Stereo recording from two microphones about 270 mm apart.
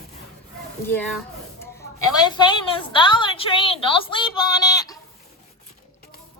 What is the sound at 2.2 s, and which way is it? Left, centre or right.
A woman's voice, centre.